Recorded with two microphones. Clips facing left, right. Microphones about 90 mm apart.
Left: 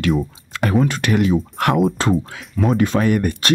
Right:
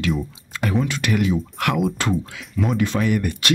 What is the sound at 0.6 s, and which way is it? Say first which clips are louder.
Speech: left 4 dB; 45° left (ahead or behind).